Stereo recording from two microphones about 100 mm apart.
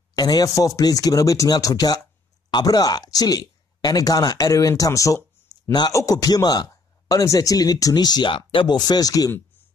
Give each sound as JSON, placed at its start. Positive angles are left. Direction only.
{"t": 0.1, "sound": "speech", "side_deg": 40}
{"t": 8.7, "sound": "speech", "side_deg": 40}